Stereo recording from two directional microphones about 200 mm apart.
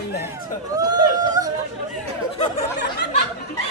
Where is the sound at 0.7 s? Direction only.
20° right (ahead or behind).